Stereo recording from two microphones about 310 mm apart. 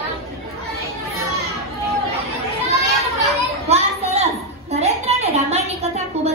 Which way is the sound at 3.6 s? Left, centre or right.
Centre.